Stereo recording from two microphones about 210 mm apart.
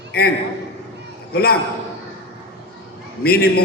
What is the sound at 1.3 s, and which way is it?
Speech, 45° left (ahead or behind).